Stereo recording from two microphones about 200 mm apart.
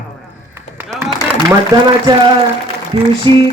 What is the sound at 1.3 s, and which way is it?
Speech, 20° right (ahead or behind).